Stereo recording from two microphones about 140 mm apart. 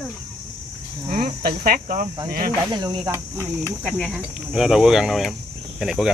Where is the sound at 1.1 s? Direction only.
90° right.